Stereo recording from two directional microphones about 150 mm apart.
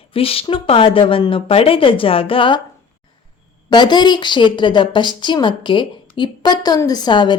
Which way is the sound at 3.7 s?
30° left (ahead or behind).